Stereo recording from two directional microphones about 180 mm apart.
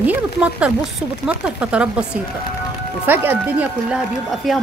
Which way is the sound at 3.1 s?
10° right (ahead or behind).